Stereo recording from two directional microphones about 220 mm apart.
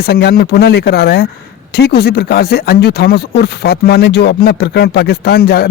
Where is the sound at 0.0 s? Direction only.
45° left (ahead or behind).